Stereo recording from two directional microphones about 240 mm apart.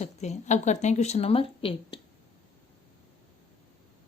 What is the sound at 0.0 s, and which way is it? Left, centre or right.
A woman's voice, left.